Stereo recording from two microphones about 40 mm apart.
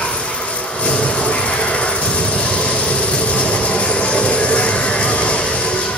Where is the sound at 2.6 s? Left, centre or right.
Left.